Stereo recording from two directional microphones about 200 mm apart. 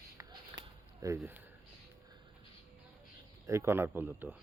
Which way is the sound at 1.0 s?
15° right (ahead or behind).